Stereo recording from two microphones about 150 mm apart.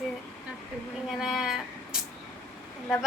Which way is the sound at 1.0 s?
Centre (ahead or behind).